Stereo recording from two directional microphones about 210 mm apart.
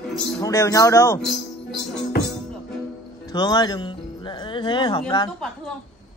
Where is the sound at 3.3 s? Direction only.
20° left (ahead or behind).